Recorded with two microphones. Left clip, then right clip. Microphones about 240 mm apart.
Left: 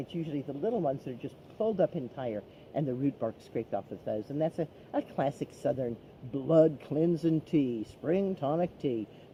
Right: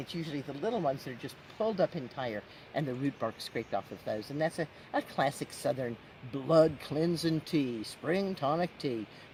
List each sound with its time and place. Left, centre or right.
0.3 s speech: right